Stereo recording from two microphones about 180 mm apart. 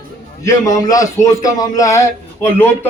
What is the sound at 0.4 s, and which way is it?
A man's voice, 20° left (ahead or behind).